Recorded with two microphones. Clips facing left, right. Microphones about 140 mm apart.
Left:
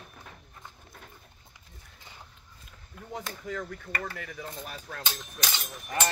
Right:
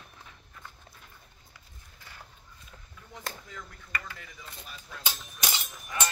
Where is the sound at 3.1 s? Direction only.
75° left (ahead or behind).